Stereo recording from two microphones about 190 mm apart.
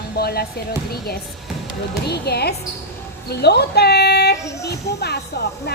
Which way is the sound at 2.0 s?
60° left (ahead or behind).